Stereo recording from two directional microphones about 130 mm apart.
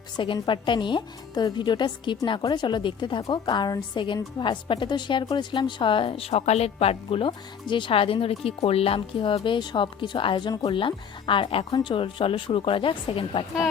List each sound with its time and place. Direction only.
0.4 s a woman's voice: 40° left (ahead or behind)